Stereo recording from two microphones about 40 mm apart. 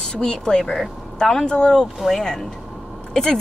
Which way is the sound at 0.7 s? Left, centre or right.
Centre.